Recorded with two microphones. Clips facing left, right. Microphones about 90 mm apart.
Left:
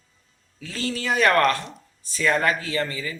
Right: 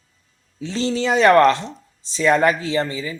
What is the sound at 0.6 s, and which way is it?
Speech, 25° right (ahead or behind).